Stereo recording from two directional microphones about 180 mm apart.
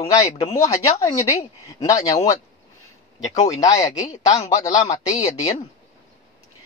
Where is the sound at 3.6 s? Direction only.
20° left (ahead or behind).